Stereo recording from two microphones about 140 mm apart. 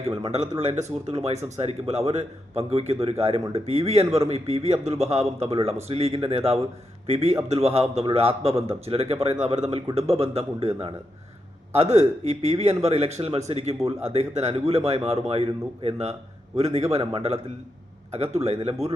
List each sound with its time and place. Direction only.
0.0 s speech: 45° right (ahead or behind)